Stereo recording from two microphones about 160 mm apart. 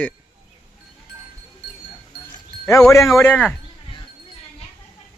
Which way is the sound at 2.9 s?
20° left (ahead or behind).